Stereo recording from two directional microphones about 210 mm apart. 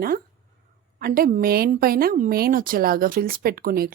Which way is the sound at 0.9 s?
45° right (ahead or behind).